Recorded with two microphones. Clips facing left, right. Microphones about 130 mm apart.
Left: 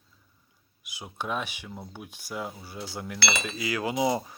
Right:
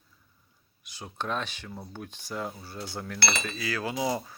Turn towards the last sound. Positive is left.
turn(degrees=20)  # may be behind; listen again after turning